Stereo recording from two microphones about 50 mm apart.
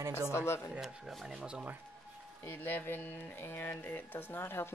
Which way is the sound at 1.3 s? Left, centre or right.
Centre.